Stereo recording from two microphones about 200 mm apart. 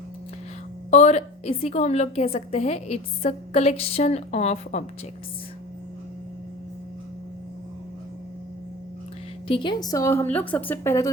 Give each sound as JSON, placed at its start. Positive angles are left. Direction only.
{"t": 0.9, "sound": "a woman's voice", "side_deg": 35}
{"t": 9.5, "sound": "a woman's voice", "side_deg": 20}